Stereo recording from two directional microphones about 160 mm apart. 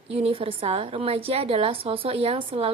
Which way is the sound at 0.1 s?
35° right (ahead or behind).